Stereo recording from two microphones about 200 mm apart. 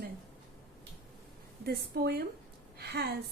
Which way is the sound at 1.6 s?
50° right (ahead or behind).